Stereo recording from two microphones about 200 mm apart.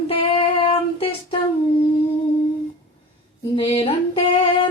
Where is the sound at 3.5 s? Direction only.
30° left (ahead or behind).